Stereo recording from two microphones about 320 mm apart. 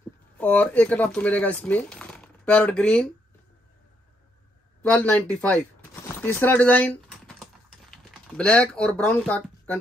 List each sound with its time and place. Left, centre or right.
0.4 s speech: centre
4.8 s speech: centre